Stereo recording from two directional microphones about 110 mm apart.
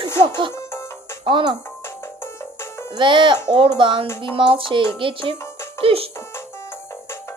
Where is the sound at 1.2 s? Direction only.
45° right (ahead or behind).